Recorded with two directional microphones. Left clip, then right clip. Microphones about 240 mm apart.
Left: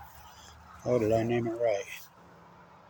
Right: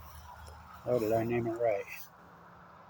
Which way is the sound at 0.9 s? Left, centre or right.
Left.